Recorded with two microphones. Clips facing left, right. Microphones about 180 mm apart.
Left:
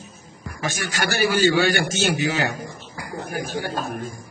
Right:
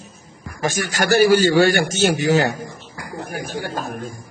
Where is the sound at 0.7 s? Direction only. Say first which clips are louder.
Right 8 dB; 40° right (ahead or behind).